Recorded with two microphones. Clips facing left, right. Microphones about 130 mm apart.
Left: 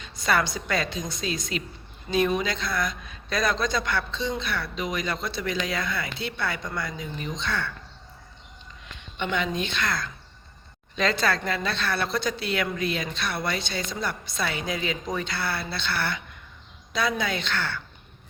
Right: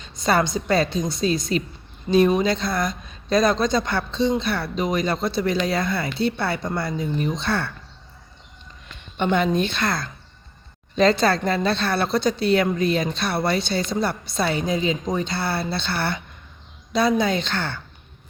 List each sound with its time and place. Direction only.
0.0 s a woman's voice: 30° right (ahead or behind)
9.1 s speech: 40° right (ahead or behind)